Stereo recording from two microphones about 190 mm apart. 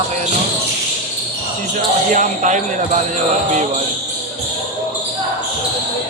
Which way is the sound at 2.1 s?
40° right (ahead or behind).